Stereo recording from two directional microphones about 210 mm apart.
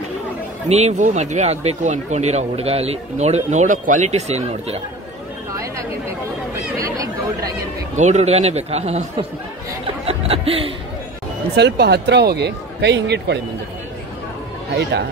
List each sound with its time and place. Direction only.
0.7 s speech: 30° right (ahead or behind)
6.6 s speech: 15° right (ahead or behind)
7.9 s speech: 35° right (ahead or behind)
10.0 s speech: 30° right (ahead or behind)
11.5 s speech: 50° right (ahead or behind)